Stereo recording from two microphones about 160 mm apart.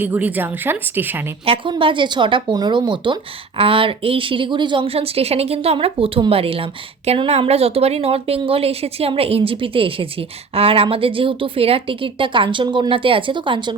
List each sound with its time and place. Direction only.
0.0 s a woman's voice: 10° right (ahead or behind)
1.5 s a woman's voice: 30° right (ahead or behind)